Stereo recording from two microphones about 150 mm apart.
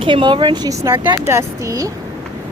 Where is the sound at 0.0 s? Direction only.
35° right (ahead or behind).